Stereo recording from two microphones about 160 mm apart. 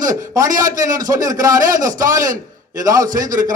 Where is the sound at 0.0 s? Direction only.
20° right (ahead or behind).